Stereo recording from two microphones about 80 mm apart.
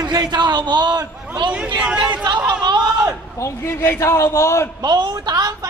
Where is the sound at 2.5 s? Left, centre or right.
Right.